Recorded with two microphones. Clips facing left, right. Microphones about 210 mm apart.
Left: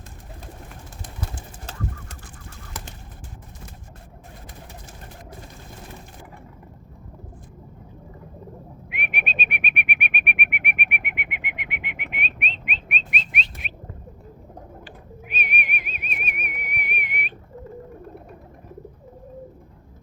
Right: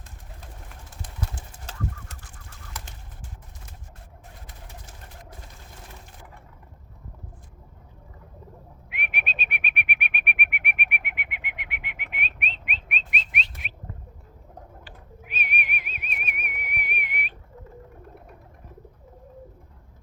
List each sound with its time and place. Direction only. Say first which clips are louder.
8.9 s bird: left 3 dB; 15° left (ahead or behind)
14.8 s whistling: left 5 dB; 15° left (ahead or behind)